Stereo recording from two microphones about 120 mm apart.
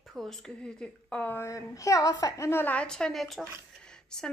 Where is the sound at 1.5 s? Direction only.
25° left (ahead or behind).